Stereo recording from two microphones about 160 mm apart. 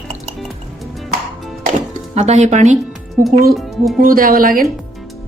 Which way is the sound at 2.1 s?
45° right (ahead or behind).